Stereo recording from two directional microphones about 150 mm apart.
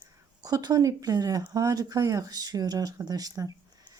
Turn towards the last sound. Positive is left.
turn(degrees=-25)  # may be behind; listen again after turning